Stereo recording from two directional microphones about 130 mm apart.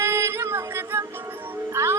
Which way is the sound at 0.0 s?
20° right (ahead or behind).